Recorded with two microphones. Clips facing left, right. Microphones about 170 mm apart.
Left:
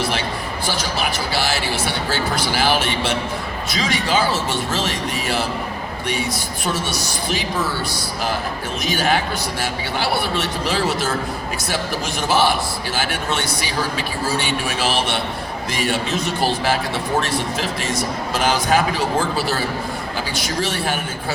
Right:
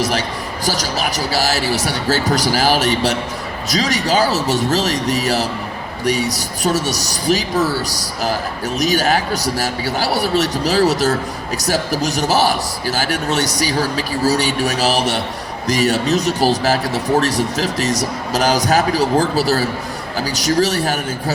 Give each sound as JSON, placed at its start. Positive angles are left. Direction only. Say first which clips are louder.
{"t": 0.6, "sound": "a man's voice", "louder": "right 3 dB", "side_deg": -40}